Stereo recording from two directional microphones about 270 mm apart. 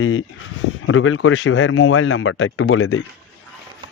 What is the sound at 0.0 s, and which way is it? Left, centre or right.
Speech, left.